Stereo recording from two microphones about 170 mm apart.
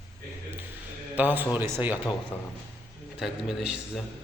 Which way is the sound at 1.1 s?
10° right (ahead or behind).